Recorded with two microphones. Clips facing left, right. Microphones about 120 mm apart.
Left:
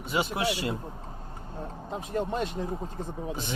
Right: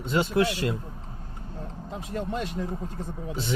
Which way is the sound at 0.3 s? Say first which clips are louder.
Right 5 dB; 20° left (ahead or behind).